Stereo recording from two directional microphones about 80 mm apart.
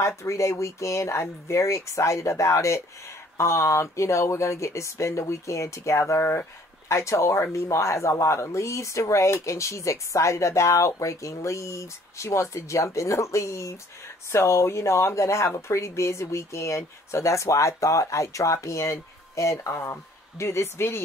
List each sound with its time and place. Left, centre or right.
0.2 s speech: left